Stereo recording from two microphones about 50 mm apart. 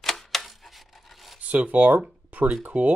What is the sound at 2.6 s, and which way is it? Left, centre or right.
Speech, right.